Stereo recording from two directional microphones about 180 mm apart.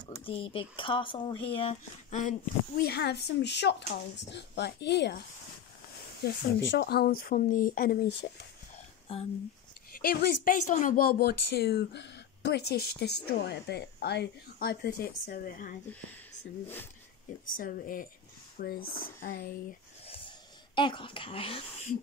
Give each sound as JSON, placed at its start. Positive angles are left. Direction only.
{"t": 0.2, "sound": "speech", "side_deg": 30}
{"t": 2.8, "sound": "speech", "side_deg": 65}
{"t": 6.2, "sound": "a woman's voice", "side_deg": 60}
{"t": 9.1, "sound": "speech", "side_deg": 30}
{"t": 10.2, "sound": "a woman's voice", "side_deg": 50}
{"t": 17.5, "sound": "a woman's voice", "side_deg": 50}
{"t": 20.1, "sound": "a sound", "side_deg": 25}